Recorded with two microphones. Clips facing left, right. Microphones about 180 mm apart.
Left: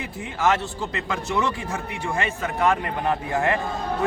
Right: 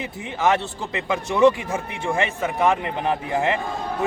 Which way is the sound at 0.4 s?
20° right (ahead or behind).